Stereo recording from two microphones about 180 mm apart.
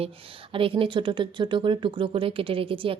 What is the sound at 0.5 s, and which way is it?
Speech, 30° right (ahead or behind).